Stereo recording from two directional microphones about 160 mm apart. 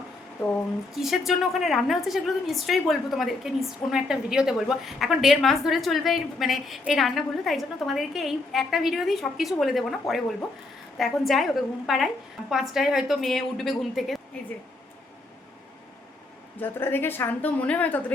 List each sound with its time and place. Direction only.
0.9 s a woman's voice: centre (ahead or behind)
16.6 s a woman's voice: 15° left (ahead or behind)